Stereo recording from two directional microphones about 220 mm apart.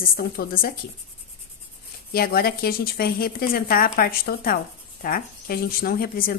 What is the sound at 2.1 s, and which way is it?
A woman's voice, 45° left (ahead or behind).